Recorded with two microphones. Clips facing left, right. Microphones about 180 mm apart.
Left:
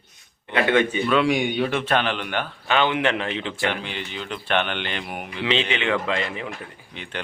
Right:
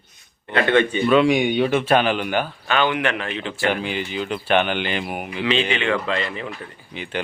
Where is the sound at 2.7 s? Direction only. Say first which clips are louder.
Left 1 dB; 25° left (ahead or behind).